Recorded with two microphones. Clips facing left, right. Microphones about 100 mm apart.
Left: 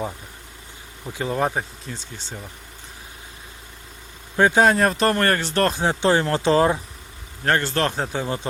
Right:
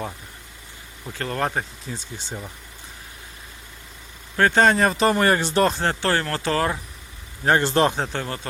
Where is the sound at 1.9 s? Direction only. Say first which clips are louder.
Right 2 dB; 10° right (ahead or behind).